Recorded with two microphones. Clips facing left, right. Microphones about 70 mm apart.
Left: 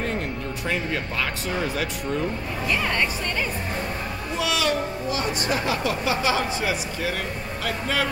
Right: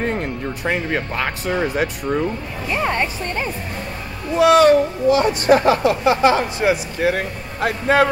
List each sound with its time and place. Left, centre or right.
0.0 s speech: right
2.7 s speech: right
4.4 s speech: right